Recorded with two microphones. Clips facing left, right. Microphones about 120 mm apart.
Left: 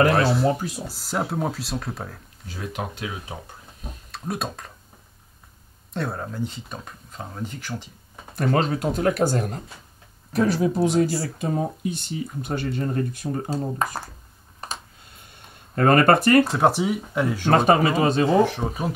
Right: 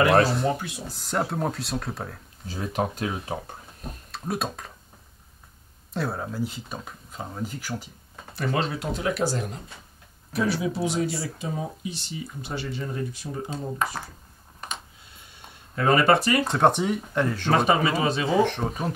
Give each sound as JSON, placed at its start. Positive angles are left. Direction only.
{"t": 0.3, "sound": "speech", "side_deg": 0}
{"t": 0.6, "sound": "speech", "side_deg": 40}
{"t": 0.8, "sound": "speech", "side_deg": 0}
{"t": 2.7, "sound": "speech", "side_deg": -40}
{"t": 3.8, "sound": "speech", "side_deg": 0}
{"t": 5.9, "sound": "speech", "side_deg": 0}
{"t": 8.4, "sound": "speech", "side_deg": 45}
{"t": 10.3, "sound": "speech", "side_deg": 0}
{"t": 11.3, "sound": "speech", "side_deg": 45}
{"t": 13.5, "sound": "speech", "side_deg": 35}
{"t": 13.8, "sound": "speech", "side_deg": 0}
{"t": 15.7, "sound": "speech", "side_deg": 50}
{"t": 16.4, "sound": "speech", "side_deg": 5}